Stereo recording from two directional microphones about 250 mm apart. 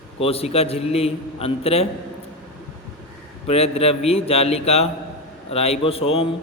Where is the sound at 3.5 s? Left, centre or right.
Left.